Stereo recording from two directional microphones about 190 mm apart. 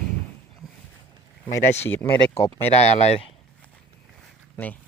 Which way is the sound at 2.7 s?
35° left (ahead or behind).